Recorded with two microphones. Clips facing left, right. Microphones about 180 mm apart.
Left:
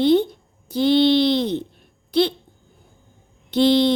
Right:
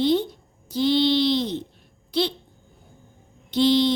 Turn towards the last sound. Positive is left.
turn(degrees=55)  # may be behind; listen again after turning